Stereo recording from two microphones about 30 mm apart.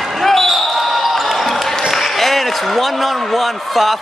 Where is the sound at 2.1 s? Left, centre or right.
Centre.